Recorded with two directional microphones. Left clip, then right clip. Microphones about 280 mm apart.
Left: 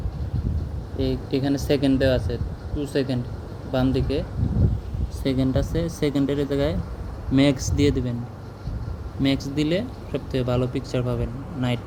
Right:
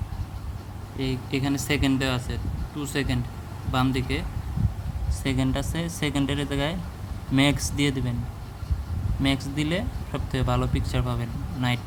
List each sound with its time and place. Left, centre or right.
0.9 s speech: centre
9.2 s speech: centre